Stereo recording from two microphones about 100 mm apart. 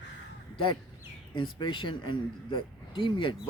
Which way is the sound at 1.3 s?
50° left (ahead or behind).